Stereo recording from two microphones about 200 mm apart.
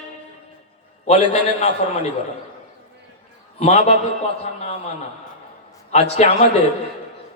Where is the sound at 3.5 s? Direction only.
30° left (ahead or behind).